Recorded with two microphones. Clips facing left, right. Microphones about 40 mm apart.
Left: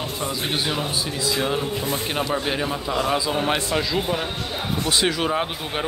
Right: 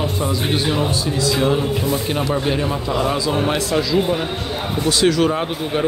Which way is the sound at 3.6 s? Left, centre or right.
Left.